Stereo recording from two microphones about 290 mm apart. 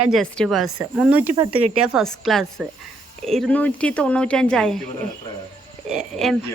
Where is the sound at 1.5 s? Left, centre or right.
Centre.